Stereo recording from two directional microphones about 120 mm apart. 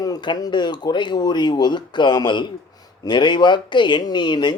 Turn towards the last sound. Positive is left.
turn(degrees=40)  # may be behind; listen again after turning